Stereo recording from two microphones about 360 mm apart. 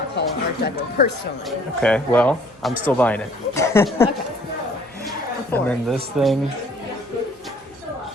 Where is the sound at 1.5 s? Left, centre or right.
Centre.